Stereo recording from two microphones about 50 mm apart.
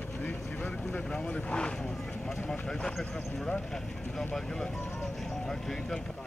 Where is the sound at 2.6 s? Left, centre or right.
Centre.